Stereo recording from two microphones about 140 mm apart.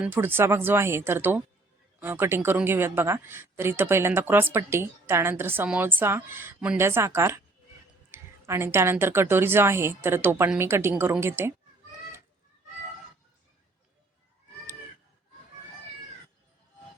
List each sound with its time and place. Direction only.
0.0 s speech: 15° right (ahead or behind)